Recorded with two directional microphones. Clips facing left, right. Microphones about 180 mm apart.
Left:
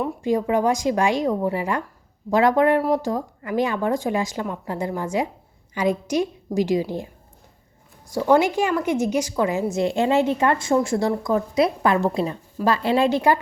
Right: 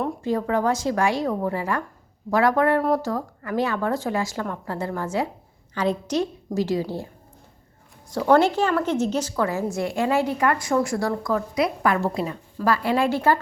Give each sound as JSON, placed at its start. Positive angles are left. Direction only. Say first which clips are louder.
{"t": 0.2, "sound": "a woman's voice", "louder": "left 4 dB", "side_deg": 15}
{"t": 8.3, "sound": "a woman's voice", "louder": "even", "side_deg": 10}